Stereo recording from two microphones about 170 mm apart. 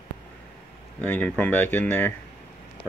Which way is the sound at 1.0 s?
10° left (ahead or behind).